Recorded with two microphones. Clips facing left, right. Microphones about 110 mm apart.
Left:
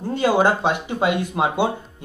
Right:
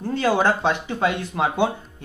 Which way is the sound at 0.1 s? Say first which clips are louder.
Left 2 dB; 15° left (ahead or behind).